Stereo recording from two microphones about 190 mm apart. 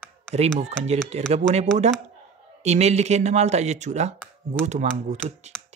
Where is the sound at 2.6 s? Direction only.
35° right (ahead or behind).